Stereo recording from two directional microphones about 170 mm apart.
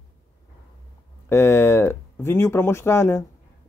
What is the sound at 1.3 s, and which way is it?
Speech, 15° left (ahead or behind).